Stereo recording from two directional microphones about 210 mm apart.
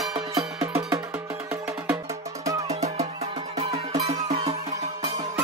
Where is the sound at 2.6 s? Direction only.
30° right (ahead or behind).